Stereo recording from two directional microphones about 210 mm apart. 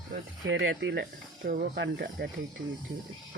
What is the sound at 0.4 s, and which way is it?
Speech, 65° right (ahead or behind).